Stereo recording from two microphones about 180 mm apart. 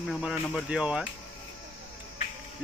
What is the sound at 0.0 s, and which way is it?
Speech, 5° right (ahead or behind).